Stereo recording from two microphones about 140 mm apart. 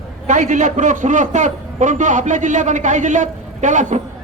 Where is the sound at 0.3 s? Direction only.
60° right (ahead or behind).